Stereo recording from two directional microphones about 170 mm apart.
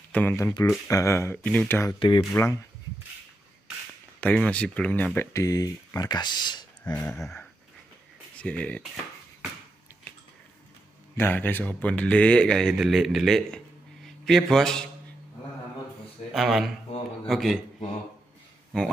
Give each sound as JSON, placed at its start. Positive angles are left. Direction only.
{"t": 0.1, "sound": "speech", "side_deg": 10}
{"t": 2.0, "sound": "speech", "side_deg": 30}
{"t": 2.3, "sound": "speech", "side_deg": 15}
{"t": 4.2, "sound": "speech", "side_deg": 10}
{"t": 8.4, "sound": "speech", "side_deg": 10}
{"t": 11.1, "sound": "a man's voice", "side_deg": 10}
{"t": 16.3, "sound": "speech", "side_deg": 0}